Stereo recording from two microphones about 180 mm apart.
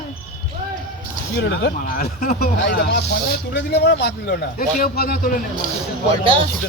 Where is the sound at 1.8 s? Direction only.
55° left (ahead or behind).